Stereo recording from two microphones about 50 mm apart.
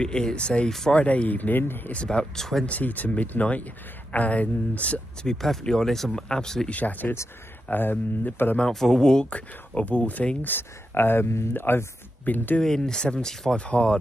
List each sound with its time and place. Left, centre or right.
0.0 s speech: centre
0.7 s speech: centre
0.9 s speech: left
2.0 s speech: centre
2.6 s speech: left
5.2 s speech: centre
6.7 s speech: left
8.5 s speech: centre; by 12.4 s left
12.6 s speech: centre
13.6 s speech: left